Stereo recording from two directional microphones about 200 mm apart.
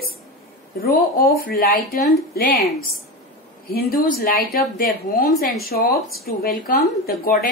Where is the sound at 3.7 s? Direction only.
50° left (ahead or behind).